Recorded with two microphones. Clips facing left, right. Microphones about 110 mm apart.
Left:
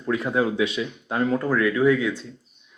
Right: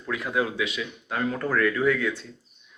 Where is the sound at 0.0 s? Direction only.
30° left (ahead or behind).